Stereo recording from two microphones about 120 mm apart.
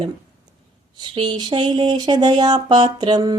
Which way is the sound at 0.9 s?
40° right (ahead or behind).